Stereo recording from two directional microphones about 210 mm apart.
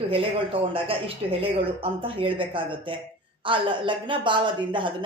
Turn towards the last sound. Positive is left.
turn(degrees=-25)  # may be behind; listen again after turning